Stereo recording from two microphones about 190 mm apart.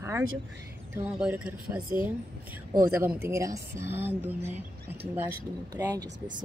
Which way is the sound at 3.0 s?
10° right (ahead or behind).